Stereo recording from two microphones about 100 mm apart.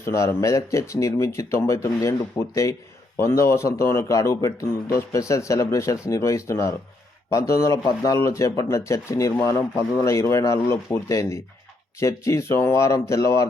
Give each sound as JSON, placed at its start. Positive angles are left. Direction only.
{"t": 0.0, "sound": "speech", "side_deg": 30}